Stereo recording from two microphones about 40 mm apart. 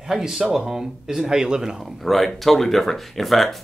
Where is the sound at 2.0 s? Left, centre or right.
Centre.